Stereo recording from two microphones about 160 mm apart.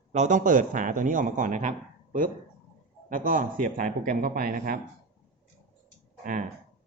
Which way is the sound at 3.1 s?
55° right (ahead or behind).